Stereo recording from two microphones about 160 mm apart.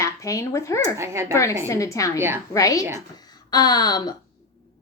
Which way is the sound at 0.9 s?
15° right (ahead or behind).